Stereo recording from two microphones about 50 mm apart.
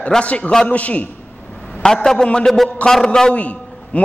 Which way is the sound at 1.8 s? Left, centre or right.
Centre.